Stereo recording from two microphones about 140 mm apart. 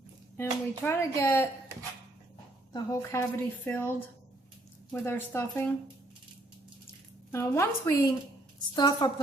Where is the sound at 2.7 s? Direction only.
20° left (ahead or behind).